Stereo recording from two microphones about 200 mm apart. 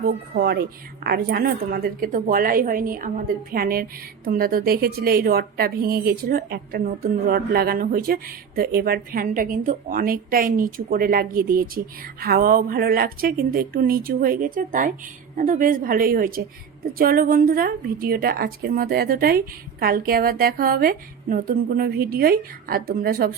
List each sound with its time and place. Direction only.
0.0 s a woman's voice: 45° right (ahead or behind)